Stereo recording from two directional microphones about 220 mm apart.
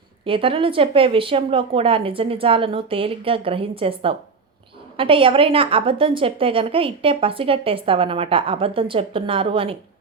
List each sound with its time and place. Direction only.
0.3 s a woman's voice: 25° right (ahead or behind)